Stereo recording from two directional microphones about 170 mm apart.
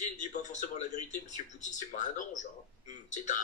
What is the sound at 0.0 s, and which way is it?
A man's voice, 45° left (ahead or behind).